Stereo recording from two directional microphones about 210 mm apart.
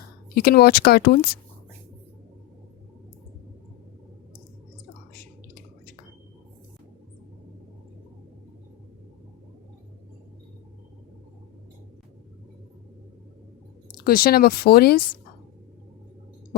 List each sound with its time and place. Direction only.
0.3 s speech: 45° left (ahead or behind)
13.9 s speech: 45° left (ahead or behind)